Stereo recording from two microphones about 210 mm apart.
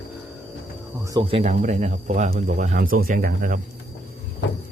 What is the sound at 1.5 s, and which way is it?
Speech, 35° right (ahead or behind).